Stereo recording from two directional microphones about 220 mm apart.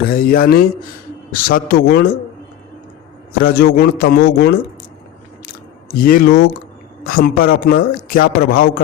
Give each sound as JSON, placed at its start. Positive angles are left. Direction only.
{"t": 0.0, "sound": "a man's voice", "side_deg": 40}
{"t": 3.3, "sound": "a man's voice", "side_deg": 40}
{"t": 6.0, "sound": "a man's voice", "side_deg": 40}